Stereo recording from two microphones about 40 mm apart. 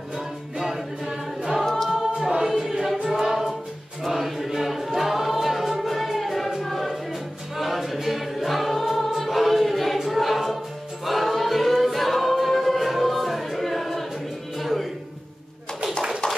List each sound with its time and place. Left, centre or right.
0.6 s choir: centre
1.6 s a capella: centre
1.9 s a capella: centre
3.1 s music: centre
4.0 s choir: centre
6.6 s music: centre
7.5 s choir: centre
14.6 s a sound: centre